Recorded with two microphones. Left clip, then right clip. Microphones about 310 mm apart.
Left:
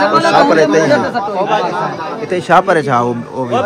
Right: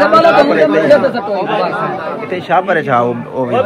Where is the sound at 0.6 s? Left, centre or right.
Centre.